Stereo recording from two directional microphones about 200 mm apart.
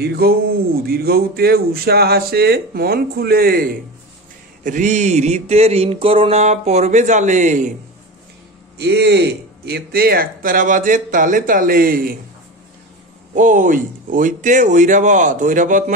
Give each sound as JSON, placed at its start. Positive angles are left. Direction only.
{"t": 0.0, "sound": "speech", "side_deg": -50}
{"t": 4.6, "sound": "mantra", "side_deg": -40}
{"t": 8.7, "sound": "speech", "side_deg": -55}
{"t": 13.3, "sound": "mantra", "side_deg": -40}